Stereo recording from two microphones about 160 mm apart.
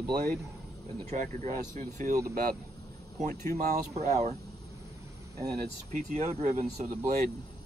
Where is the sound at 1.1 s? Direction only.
50° right (ahead or behind).